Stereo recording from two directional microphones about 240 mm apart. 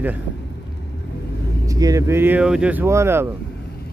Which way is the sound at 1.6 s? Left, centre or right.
Centre.